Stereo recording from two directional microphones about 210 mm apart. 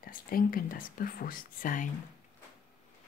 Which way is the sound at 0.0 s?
45° left (ahead or behind).